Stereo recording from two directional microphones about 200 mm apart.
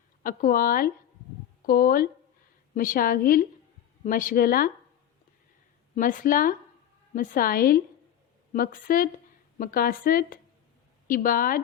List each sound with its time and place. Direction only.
0.2 s speech: 45° left (ahead or behind)
5.9 s speech: 40° left (ahead or behind)